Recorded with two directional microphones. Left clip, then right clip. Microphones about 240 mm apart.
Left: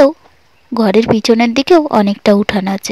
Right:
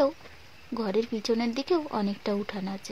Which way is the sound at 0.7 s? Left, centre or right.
Left.